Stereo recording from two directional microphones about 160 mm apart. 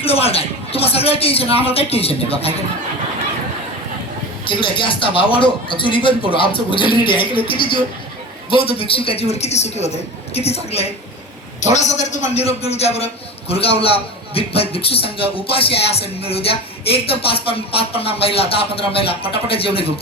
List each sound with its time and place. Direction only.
0.0 s speech: 40° left (ahead or behind)
4.4 s speech: 30° left (ahead or behind)